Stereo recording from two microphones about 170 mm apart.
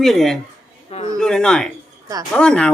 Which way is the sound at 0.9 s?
35° left (ahead or behind).